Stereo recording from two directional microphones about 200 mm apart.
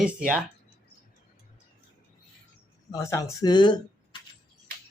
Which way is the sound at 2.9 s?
15° left (ahead or behind).